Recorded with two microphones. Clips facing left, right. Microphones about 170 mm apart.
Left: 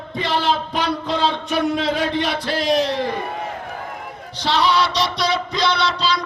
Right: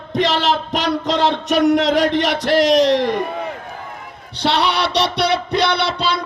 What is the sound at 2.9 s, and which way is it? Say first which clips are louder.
Music: right 6 dB; 80° right.